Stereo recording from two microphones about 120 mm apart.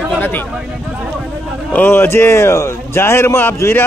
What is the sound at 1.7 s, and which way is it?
A man's voice, 15° left (ahead or behind).